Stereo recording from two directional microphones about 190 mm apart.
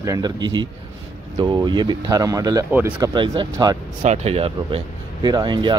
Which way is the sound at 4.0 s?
35° right (ahead or behind).